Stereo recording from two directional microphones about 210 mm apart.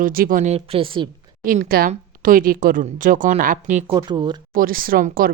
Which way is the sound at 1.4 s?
45° right (ahead or behind).